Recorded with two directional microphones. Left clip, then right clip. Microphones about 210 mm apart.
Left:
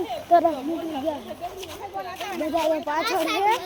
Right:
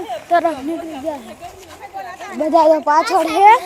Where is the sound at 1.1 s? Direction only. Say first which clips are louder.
Right 5 dB; 10° right (ahead or behind).